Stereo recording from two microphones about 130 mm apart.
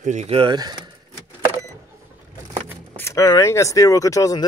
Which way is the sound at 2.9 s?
20° left (ahead or behind).